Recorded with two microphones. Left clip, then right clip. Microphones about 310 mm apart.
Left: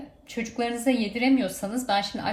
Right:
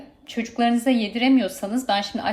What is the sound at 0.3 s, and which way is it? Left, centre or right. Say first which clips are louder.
A woman's voice: right 6 dB; right.